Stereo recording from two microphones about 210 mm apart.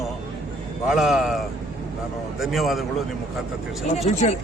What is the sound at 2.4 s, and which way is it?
Speech, centre (ahead or behind).